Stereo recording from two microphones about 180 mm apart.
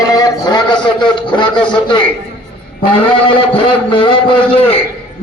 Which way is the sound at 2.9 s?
30° left (ahead or behind).